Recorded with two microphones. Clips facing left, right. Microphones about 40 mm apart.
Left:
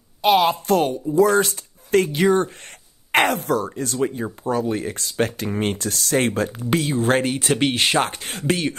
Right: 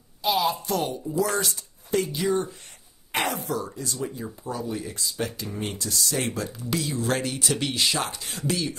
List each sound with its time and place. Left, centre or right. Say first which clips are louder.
0.2 s speech: left 7 dB; left